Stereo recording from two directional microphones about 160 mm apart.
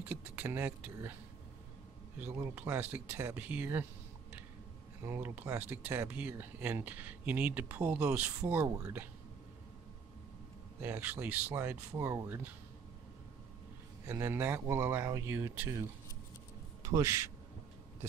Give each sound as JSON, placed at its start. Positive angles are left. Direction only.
{"t": 0.0, "sound": "speech", "side_deg": -10}
{"t": 2.1, "sound": "speech", "side_deg": -15}
{"t": 5.0, "sound": "speech", "side_deg": -15}
{"t": 10.8, "sound": "speech", "side_deg": -10}
{"t": 14.0, "sound": "speech", "side_deg": -15}
{"t": 16.8, "sound": "a man's voice", "side_deg": -20}